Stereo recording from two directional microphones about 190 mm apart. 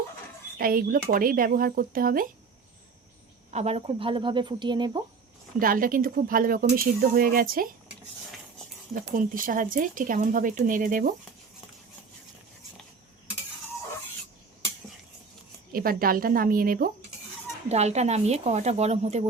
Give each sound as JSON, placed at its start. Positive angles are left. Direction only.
{"t": 0.6, "sound": "speech", "side_deg": -50}
{"t": 3.5, "sound": "speech", "side_deg": -35}
{"t": 5.5, "sound": "speech", "side_deg": -50}
{"t": 9.0, "sound": "speech", "side_deg": -45}
{"t": 15.7, "sound": "speech", "side_deg": -50}
{"t": 17.7, "sound": "speech", "side_deg": -35}